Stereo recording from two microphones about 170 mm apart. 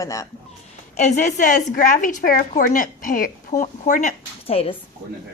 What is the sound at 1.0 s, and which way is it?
A woman's voice, 45° left (ahead or behind).